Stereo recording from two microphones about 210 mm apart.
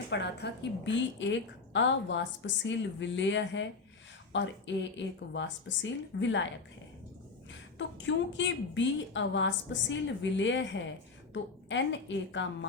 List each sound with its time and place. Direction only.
0.1 s a woman's voice: 55° left (ahead or behind)
7.8 s a woman's voice: 60° left (ahead or behind)